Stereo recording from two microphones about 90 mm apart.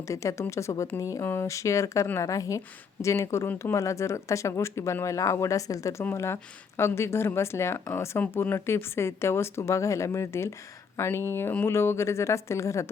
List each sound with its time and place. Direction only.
0.0 s speech: 35° left (ahead or behind)